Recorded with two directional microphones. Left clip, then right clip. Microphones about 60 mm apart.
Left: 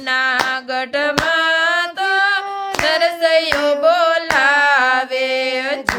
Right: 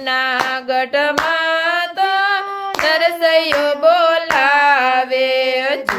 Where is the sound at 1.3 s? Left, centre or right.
Right.